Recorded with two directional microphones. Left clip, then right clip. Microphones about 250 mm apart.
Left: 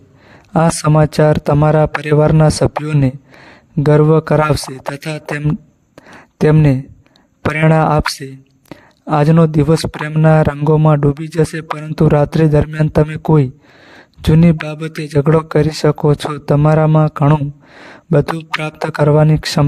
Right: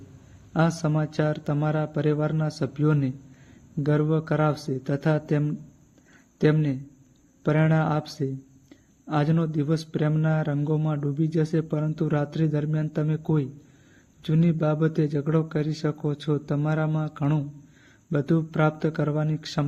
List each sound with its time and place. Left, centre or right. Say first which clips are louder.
0.5 s speech: left 13 dB; left
6.0 s a sound: left 9 dB; left
7.4 s speech: left 11 dB; left